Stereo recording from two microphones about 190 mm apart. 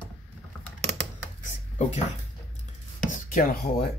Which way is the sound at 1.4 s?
40° left (ahead or behind).